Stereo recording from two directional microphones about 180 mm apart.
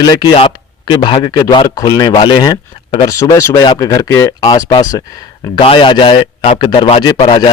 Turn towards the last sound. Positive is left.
turn(degrees=25)  # may be behind; listen again after turning